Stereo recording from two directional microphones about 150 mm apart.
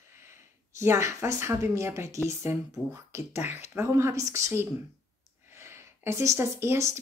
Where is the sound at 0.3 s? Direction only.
20° right (ahead or behind).